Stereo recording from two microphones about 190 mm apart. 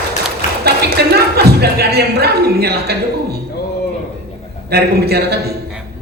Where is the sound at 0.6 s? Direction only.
55° right (ahead or behind).